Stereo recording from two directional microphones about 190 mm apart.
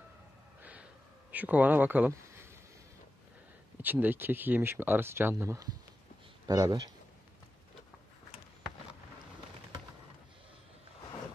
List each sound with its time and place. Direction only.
0.6 s a sound: 10° right (ahead or behind)
1.3 s speech: 10° right (ahead or behind)
3.8 s speech: 10° right (ahead or behind)